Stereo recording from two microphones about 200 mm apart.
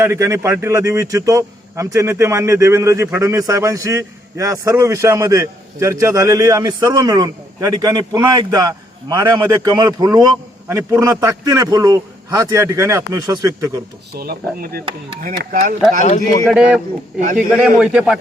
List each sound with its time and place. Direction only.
0.0 s a man's voice: 15° right (ahead or behind)
14.2 s speech: 50° right (ahead or behind)
16.5 s a man's voice: 5° right (ahead or behind)